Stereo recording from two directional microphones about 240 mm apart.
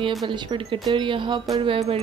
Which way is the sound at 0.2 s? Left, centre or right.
Centre.